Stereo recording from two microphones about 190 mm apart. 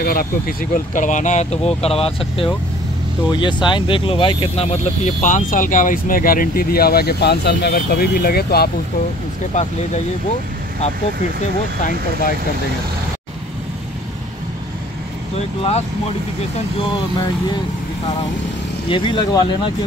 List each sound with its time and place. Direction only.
0.0 s speech: 50° left (ahead or behind); by 4.7 s 30° left (ahead or behind)
5.2 s speech: 45° left (ahead or behind)
11.8 s speech: 45° left (ahead or behind)
18.9 s speech: 25° left (ahead or behind)